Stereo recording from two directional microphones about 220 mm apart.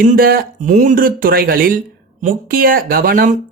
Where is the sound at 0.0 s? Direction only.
40° right (ahead or behind).